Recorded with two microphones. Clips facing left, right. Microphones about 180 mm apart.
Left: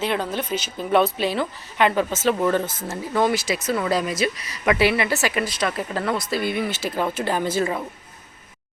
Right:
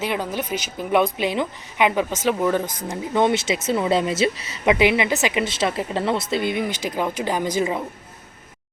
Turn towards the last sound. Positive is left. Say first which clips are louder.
# right 1 dB
turn(degrees=-15)  # may be behind; listen again after turning